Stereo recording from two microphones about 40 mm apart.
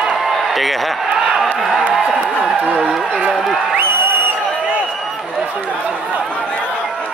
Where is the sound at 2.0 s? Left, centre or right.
Centre.